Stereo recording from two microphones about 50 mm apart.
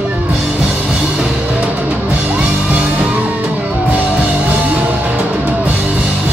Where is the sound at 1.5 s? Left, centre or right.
Right.